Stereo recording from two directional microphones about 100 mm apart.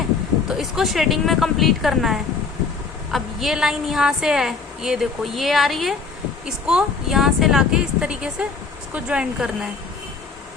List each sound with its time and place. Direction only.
0.4 s a woman's voice: 5° right (ahead or behind)